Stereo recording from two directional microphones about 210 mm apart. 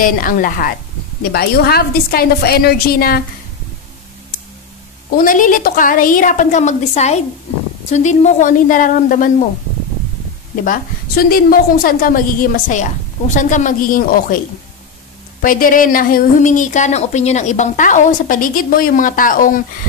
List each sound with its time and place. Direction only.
0.0 s a woman's voice: 40° left (ahead or behind)
5.1 s a woman's voice: 40° left (ahead or behind)
10.6 s a woman's voice: 40° left (ahead or behind)
15.4 s a woman's voice: 40° left (ahead or behind)